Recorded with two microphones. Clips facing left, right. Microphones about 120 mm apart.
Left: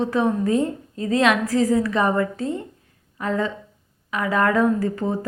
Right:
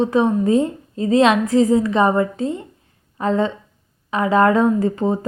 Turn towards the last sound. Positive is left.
turn(degrees=-20)  # may be behind; listen again after turning